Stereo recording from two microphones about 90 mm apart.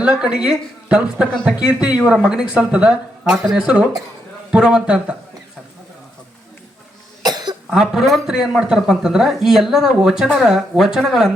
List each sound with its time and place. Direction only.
0.0 s speech: 10° right (ahead or behind)
7.2 s cough: 50° right (ahead or behind)
7.7 s speech: 5° right (ahead or behind)